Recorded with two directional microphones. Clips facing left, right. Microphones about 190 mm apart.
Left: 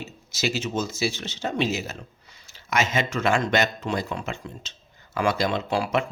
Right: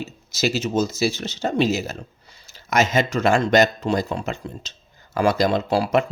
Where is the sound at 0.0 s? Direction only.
40° right (ahead or behind).